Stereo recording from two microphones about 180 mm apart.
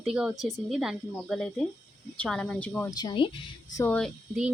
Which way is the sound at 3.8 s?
5° left (ahead or behind).